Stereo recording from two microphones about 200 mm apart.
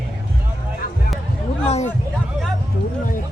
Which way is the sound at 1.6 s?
35° left (ahead or behind).